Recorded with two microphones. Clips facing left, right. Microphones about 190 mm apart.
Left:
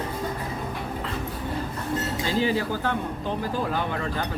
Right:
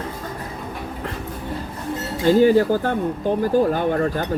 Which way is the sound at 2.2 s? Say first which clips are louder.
Right 12 dB; 50° right (ahead or behind).